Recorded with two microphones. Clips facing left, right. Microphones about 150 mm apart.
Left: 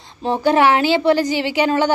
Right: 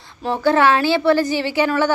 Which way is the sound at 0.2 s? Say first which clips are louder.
Left 1 dB; 20° left (ahead or behind).